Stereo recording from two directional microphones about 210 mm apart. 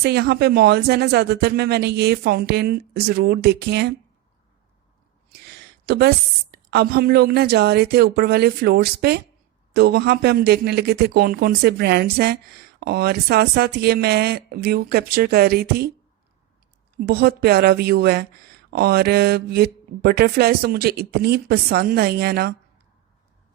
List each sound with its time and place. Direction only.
0.0 s speech: 50° right (ahead or behind)
5.6 s speech: 50° right (ahead or behind)
17.1 s speech: 50° right (ahead or behind)